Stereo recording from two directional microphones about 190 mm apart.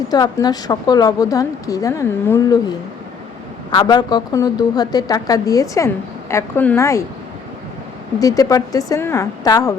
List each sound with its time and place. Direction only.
0.1 s a woman's voice: 20° left (ahead or behind)
8.2 s a woman's voice: 20° left (ahead or behind)